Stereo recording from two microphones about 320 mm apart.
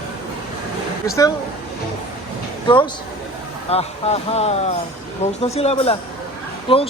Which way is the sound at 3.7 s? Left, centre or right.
Centre.